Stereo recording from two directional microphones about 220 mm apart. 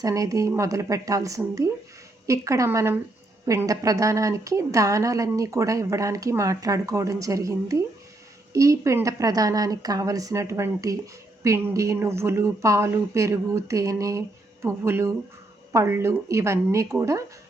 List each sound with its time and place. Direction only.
0.0 s a woman's voice: 15° right (ahead or behind)